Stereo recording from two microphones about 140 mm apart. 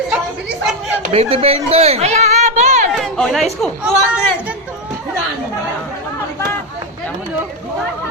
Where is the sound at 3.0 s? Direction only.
Centre (ahead or behind).